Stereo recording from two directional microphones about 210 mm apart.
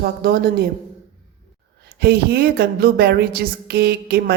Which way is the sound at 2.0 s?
50° right (ahead or behind).